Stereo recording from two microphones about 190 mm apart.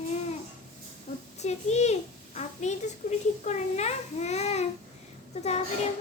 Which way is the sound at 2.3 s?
35° left (ahead or behind).